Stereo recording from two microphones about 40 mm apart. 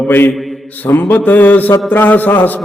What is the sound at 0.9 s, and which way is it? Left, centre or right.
A man's voice, left.